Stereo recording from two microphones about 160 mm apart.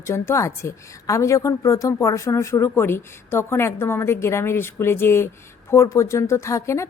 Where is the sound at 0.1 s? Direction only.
20° left (ahead or behind).